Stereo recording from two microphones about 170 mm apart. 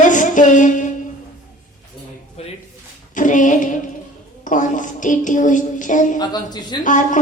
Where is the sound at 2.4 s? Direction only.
35° left (ahead or behind).